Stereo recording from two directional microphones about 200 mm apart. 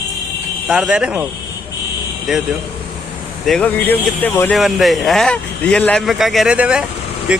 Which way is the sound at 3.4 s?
5° left (ahead or behind).